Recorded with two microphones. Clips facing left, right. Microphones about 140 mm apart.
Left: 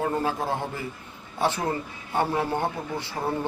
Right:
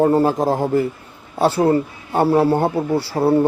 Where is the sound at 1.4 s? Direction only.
35° right (ahead or behind).